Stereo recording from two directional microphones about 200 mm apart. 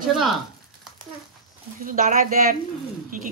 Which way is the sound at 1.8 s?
40° right (ahead or behind).